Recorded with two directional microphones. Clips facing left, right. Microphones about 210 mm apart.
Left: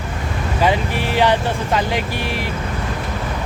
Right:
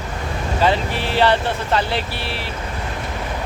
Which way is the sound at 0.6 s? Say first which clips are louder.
Left 1 dB; 10° left (ahead or behind).